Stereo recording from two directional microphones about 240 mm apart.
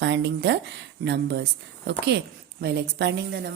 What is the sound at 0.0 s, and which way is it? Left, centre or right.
A woman's voice, right.